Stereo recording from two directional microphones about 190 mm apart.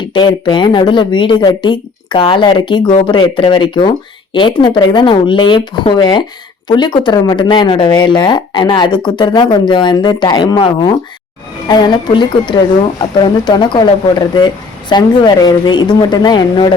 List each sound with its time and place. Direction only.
0.0 s speech: 25° left (ahead or behind)